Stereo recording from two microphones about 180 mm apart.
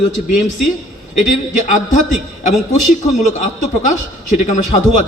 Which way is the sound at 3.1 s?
45° left (ahead or behind).